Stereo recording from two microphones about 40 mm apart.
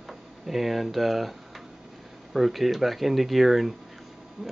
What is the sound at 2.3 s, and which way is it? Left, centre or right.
Speech, centre.